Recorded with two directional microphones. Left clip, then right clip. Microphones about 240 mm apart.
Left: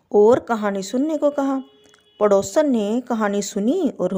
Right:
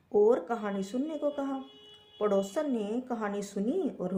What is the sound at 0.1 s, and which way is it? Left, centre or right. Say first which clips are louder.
A woman's voice: left 10 dB; left.